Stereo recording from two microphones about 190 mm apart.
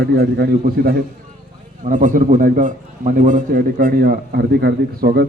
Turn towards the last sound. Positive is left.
turn(degrees=-55)  # may be behind; listen again after turning